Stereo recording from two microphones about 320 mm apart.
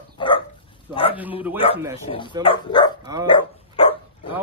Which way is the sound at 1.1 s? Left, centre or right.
Centre.